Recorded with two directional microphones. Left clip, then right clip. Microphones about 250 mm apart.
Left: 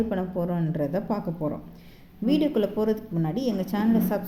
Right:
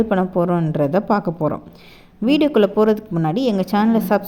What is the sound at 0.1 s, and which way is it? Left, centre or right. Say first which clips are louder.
Speech: right 11 dB; right.